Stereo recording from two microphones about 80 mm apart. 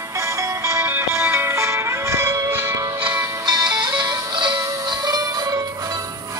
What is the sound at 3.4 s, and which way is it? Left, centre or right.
Music, right.